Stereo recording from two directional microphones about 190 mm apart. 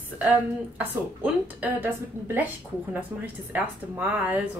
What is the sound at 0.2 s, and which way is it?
A woman's voice, 10° right (ahead or behind).